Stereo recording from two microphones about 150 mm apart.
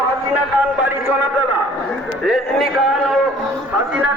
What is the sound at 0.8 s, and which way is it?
Speech, 15° right (ahead or behind).